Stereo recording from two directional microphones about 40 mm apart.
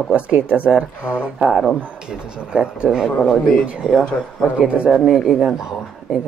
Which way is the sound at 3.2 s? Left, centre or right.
Centre.